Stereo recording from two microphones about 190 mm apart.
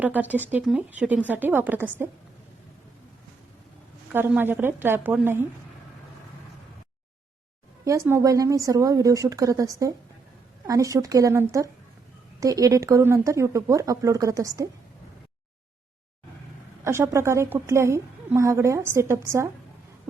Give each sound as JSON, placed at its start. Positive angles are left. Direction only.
{"t": 0.0, "sound": "a woman's voice", "side_deg": -10}
{"t": 4.1, "sound": "a woman's voice", "side_deg": -10}
{"t": 7.9, "sound": "a woman's voice", "side_deg": -15}
{"t": 16.8, "sound": "a woman's voice", "side_deg": -15}